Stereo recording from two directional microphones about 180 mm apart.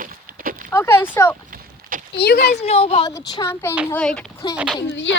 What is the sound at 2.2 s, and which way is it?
Speech, 65° left (ahead or behind).